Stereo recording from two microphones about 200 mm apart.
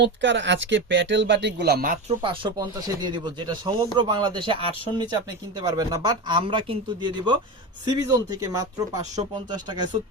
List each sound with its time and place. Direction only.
0.0 s speech: 65° right (ahead or behind); by 2.1 s 45° right (ahead or behind)
2.2 s speech: 25° right (ahead or behind)
5.5 s speech: 20° right (ahead or behind)